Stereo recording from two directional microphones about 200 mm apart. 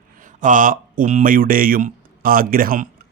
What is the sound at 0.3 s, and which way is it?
Speech, 40° right (ahead or behind).